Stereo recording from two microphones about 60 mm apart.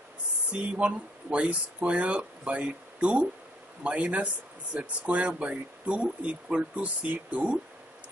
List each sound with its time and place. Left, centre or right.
0.5 s speech: right